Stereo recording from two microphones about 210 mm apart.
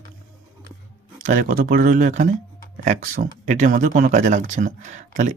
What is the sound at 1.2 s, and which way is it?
Speech, 40° right (ahead or behind).